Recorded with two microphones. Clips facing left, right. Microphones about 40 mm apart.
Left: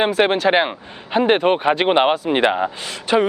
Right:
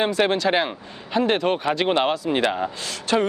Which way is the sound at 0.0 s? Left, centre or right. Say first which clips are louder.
Left 4 dB; centre.